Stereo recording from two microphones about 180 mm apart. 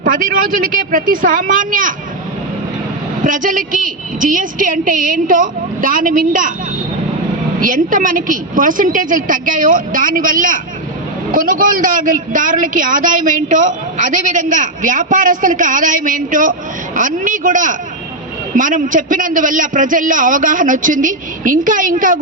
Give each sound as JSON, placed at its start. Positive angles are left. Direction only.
{"t": 0.0, "sound": "a man's voice", "side_deg": -50}
{"t": 3.2, "sound": "a man's voice", "side_deg": -45}
{"t": 7.6, "sound": "a man's voice", "side_deg": -50}